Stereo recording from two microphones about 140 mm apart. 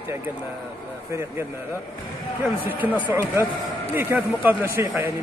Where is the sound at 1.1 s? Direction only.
20° right (ahead or behind).